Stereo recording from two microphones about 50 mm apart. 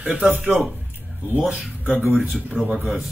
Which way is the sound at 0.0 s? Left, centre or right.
Centre.